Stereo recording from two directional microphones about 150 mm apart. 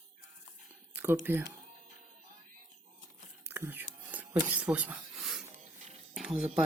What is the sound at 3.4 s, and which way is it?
Whispering, 15° right (ahead or behind).